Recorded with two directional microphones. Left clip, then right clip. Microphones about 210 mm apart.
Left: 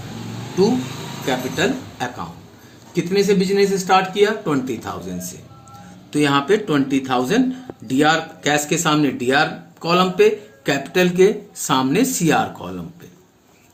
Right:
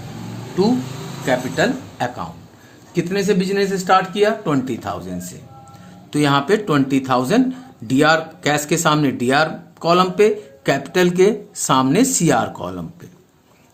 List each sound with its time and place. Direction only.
1.3 s a man's voice: 45° right (ahead or behind)